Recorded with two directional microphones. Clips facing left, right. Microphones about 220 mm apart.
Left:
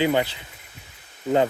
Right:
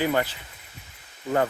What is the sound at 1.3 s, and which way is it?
Speech, 20° left (ahead or behind).